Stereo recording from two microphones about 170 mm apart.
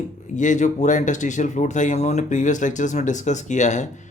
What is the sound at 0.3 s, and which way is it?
Speech, 45° left (ahead or behind).